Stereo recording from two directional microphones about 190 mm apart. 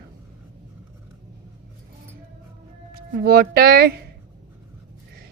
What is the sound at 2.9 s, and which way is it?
Speech, 55° right (ahead or behind).